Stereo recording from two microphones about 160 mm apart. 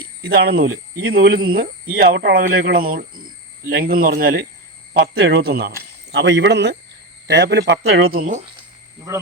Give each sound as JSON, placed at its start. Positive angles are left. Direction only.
{"t": 0.0, "sound": "speech", "side_deg": -90}
{"t": 5.1, "sound": "speech", "side_deg": -90}
{"t": 8.2, "sound": "speech", "side_deg": -50}